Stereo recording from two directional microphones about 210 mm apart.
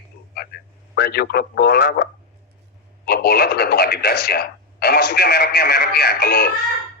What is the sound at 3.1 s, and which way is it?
Speech, 50° left (ahead or behind).